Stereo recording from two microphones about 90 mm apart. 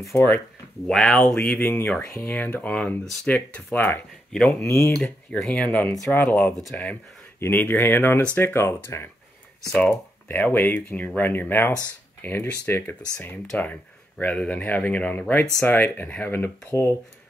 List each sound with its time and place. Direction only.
0.8 s speech: 10° left (ahead or behind)
1.8 s speech: 30° left (ahead or behind)
2.2 s speech: 20° left (ahead or behind)
4.3 s speech: 10° left (ahead or behind)
4.6 s speech: 30° left (ahead or behind)
5.4 s speech: 15° left (ahead or behind)
9.7 s speech: 10° left (ahead or behind)
10.2 s speech: 25° left (ahead or behind)
14.1 s speech: 10° left (ahead or behind)